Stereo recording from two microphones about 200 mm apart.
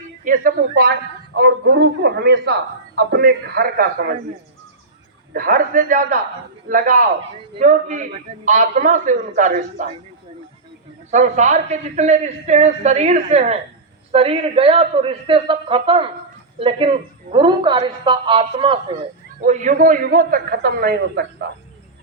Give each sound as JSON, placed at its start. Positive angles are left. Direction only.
{"t": 0.3, "sound": "a man's voice", "side_deg": -45}
{"t": 5.3, "sound": "a man's voice", "side_deg": -45}
{"t": 11.1, "sound": "a woman's voice", "side_deg": -35}
{"t": 19.5, "sound": "a man's voice", "side_deg": -40}